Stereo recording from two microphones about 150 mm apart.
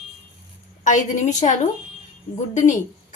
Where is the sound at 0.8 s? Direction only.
55° left (ahead or behind).